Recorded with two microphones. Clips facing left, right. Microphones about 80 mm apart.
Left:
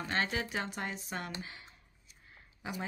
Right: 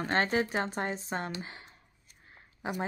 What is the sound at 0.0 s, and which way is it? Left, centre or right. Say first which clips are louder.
Speech: right 6 dB; right.